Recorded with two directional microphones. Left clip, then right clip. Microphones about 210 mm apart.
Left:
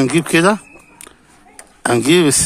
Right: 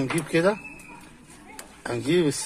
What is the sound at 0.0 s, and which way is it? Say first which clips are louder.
Speech: left 9 dB; 50° left (ahead or behind).